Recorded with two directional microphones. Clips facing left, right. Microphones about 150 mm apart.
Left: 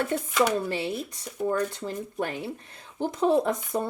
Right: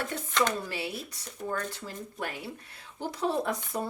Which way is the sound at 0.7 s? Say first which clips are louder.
Left 6 dB; 25° left (ahead or behind).